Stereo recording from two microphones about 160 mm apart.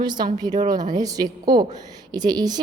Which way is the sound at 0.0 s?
25° right (ahead or behind).